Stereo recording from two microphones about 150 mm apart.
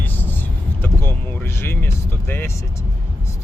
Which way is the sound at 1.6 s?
15° left (ahead or behind).